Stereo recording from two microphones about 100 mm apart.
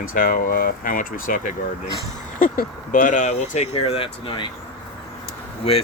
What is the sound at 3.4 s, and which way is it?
Speech, 90° left.